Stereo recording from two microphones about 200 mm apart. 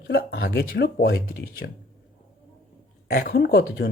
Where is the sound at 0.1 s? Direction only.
50° left (ahead or behind).